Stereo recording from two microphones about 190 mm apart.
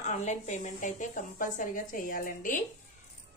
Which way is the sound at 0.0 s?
40° left (ahead or behind).